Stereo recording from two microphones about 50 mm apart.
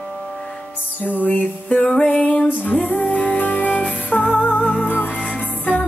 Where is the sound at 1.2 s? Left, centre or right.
Left.